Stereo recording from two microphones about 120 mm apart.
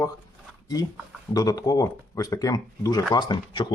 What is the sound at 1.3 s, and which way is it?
Speech, 30° left (ahead or behind).